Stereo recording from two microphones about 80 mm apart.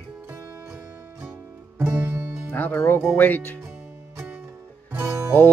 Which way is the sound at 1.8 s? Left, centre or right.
Right.